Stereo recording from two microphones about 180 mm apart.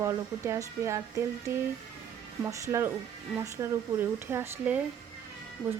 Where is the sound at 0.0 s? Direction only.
15° right (ahead or behind).